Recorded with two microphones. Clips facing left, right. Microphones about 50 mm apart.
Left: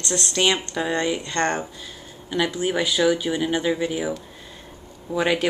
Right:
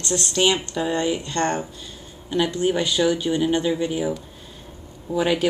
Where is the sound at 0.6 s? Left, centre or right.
Centre.